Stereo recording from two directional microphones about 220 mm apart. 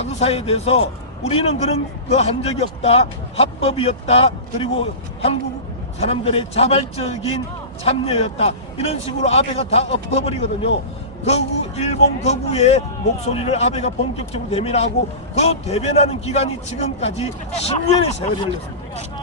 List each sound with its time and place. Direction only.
0.0 s a man's voice: 30° left (ahead or behind)